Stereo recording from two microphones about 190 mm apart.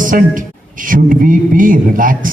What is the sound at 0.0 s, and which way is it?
A man's voice, 45° right (ahead or behind).